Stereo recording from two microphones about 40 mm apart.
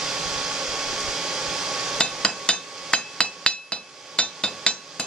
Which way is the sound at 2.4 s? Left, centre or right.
Left.